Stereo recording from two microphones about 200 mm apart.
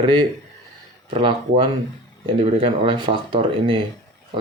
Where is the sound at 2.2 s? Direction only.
30° right (ahead or behind).